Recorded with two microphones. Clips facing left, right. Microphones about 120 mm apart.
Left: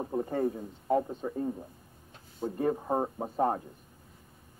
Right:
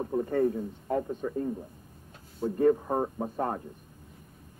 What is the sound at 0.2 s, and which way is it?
Speech, 20° left (ahead or behind).